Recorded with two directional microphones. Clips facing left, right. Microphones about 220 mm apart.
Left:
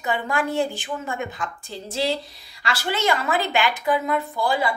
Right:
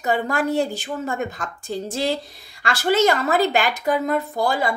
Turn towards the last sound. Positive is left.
turn(degrees=-45)  # may be behind; listen again after turning